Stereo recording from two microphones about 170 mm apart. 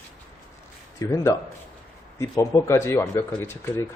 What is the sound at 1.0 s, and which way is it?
A man's voice, 20° left (ahead or behind).